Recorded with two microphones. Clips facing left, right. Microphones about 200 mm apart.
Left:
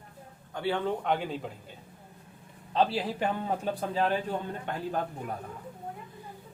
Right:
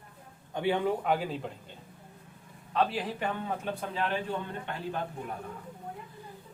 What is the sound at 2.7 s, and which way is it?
A man's voice, 30° left (ahead or behind).